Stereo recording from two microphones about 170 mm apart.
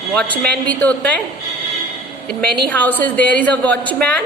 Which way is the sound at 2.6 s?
10° left (ahead or behind).